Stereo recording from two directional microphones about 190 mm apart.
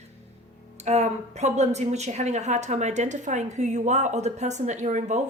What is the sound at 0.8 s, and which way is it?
A woman's voice, 35° right (ahead or behind).